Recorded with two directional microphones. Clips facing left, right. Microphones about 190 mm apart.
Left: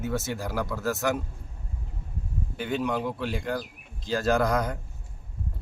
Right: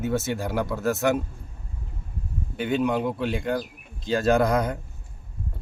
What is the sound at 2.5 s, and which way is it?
Speech, 20° right (ahead or behind).